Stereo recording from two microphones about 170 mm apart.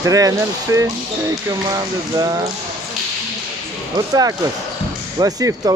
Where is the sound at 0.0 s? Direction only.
20° right (ahead or behind).